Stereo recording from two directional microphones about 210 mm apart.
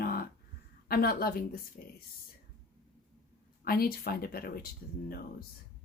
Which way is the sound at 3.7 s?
45° left (ahead or behind).